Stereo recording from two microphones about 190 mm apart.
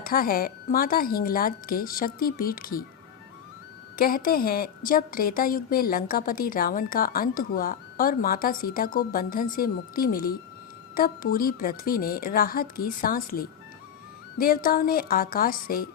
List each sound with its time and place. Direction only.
0.0 s a woman's voice: 50° left (ahead or behind)
3.9 s a woman's voice: 50° left (ahead or behind)